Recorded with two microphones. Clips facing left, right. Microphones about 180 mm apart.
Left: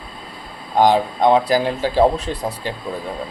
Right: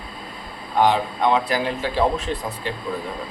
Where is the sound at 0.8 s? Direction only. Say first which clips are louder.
Left 4 dB; 35° left (ahead or behind).